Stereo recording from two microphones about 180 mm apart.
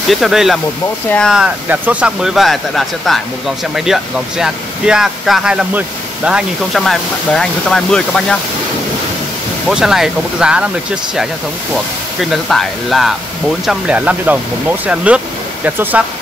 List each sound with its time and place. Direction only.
0.1 s speech: centre (ahead or behind)
9.7 s speech: centre (ahead or behind)
11.7 s speech: centre (ahead or behind)